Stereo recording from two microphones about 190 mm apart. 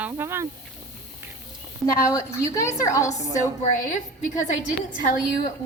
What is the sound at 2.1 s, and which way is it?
A woman's voice, 15° left (ahead or behind).